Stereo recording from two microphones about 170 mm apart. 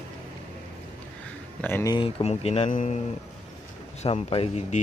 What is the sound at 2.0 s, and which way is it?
Speech, 30° left (ahead or behind).